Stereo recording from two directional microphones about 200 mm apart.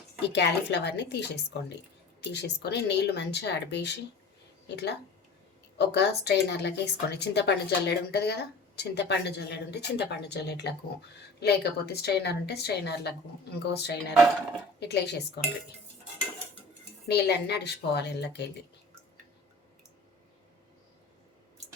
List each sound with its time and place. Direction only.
0.2 s a woman's voice: 60° left (ahead or behind)
17.1 s a woman's voice: 55° left (ahead or behind)